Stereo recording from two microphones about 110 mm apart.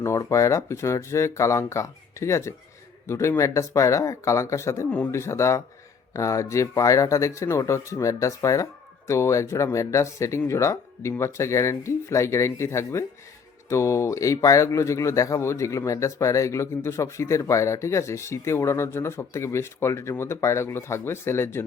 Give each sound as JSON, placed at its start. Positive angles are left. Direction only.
{"t": 0.0, "sound": "speech", "side_deg": 25}